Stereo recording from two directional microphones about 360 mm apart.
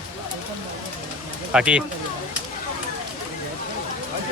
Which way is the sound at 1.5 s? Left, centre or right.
Centre.